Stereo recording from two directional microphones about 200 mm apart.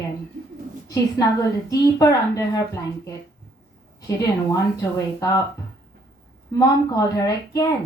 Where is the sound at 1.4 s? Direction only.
15° left (ahead or behind).